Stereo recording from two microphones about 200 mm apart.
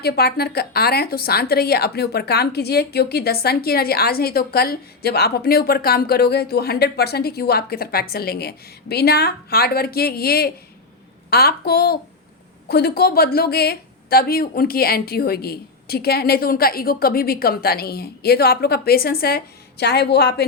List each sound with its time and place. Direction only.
0.0 s a woman's voice: 50° left (ahead or behind)